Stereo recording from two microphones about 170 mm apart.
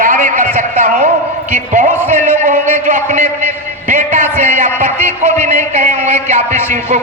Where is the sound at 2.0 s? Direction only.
45° right (ahead or behind).